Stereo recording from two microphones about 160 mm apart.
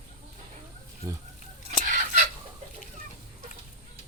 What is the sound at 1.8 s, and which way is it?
Fowl, 55° right (ahead or behind).